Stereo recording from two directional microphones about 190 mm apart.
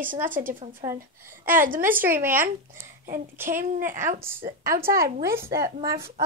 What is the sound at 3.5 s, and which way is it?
Speech, 45° right (ahead or behind).